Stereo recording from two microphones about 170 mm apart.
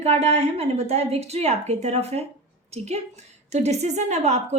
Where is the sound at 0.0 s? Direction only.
40° right (ahead or behind).